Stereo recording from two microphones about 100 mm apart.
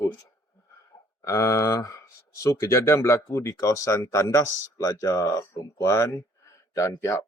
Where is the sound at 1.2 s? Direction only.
30° left (ahead or behind).